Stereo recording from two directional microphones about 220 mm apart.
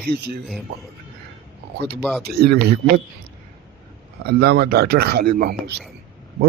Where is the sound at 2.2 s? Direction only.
45° right (ahead or behind).